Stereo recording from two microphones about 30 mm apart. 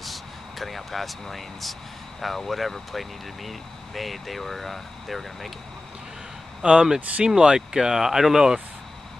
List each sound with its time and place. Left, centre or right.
0.0 s vehicle: centre
1.2 s speech: centre
6.6 s speech: right